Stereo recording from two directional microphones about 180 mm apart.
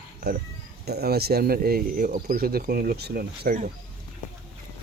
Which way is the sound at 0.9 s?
65° right (ahead or behind).